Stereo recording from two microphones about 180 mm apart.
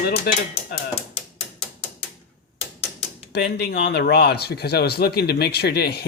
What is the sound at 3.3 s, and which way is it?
Speech, 65° left (ahead or behind).